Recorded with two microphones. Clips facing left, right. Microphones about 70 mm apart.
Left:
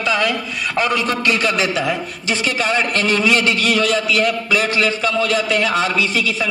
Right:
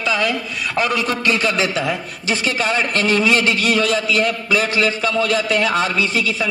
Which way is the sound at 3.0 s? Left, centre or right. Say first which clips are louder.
Right 1 dB; left.